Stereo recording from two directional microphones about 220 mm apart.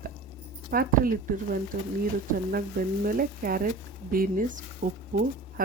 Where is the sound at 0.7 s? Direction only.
40° right (ahead or behind).